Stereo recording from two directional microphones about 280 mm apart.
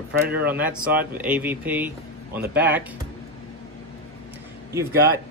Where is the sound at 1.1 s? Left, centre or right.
Centre.